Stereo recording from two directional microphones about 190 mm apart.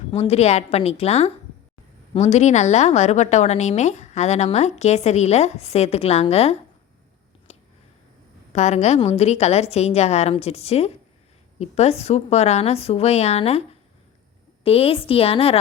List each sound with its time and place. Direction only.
0.1 s a woman's voice: 30° left (ahead or behind)
8.5 s a woman's voice: 35° left (ahead or behind)
14.6 s a woman's voice: 30° left (ahead or behind)